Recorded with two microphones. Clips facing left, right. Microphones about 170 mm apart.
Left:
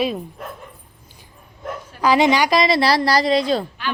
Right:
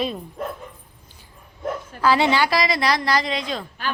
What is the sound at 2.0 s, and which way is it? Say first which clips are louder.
A woman's voice: left 3 dB; 15° left (ahead or behind).